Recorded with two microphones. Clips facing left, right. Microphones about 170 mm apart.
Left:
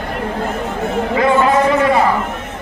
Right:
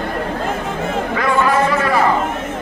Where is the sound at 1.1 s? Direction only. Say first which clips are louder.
Left 4 dB; 20° left (ahead or behind).